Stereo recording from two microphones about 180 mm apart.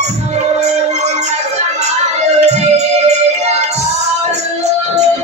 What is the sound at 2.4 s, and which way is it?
Music, 40° right (ahead or behind).